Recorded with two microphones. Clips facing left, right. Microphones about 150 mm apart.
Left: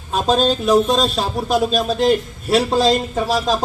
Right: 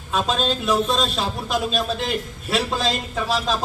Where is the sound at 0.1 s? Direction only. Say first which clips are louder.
Left 6 dB; 40° left (ahead or behind).